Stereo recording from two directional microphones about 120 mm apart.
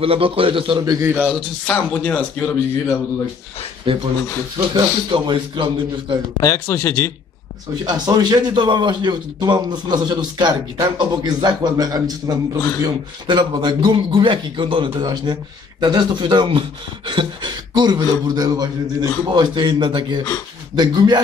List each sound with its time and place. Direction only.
0.0 s a man's voice: 50° right (ahead or behind)
1.0 s speech: 10° right (ahead or behind)
1.7 s speech: 10° left (ahead or behind)
3.9 s a man's voice: 45° right (ahead or behind)
5.1 s a man's voice: 45° right (ahead or behind)
6.4 s speech: 25° left (ahead or behind)
7.8 s speech: 35° right (ahead or behind)